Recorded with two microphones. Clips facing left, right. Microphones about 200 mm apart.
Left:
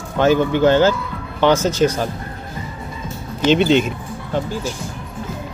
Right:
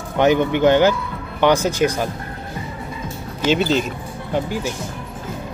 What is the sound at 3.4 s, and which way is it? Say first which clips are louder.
Speech: left 4 dB; centre (ahead or behind).